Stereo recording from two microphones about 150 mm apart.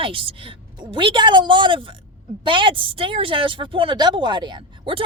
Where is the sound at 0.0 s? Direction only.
35° right (ahead or behind).